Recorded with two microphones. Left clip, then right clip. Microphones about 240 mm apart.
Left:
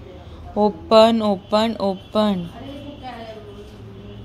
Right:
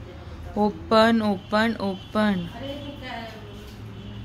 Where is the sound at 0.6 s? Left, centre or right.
Centre.